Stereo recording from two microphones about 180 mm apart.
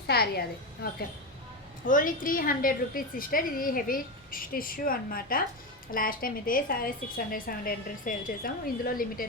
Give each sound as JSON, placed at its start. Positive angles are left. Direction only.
{"t": 0.1, "sound": "a woman's voice", "side_deg": 60}
{"t": 1.8, "sound": "a woman's voice", "side_deg": 50}